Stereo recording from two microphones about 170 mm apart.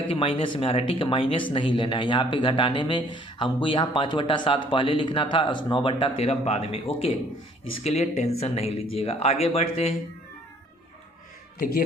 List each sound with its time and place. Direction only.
0.1 s speech: 35° left (ahead or behind)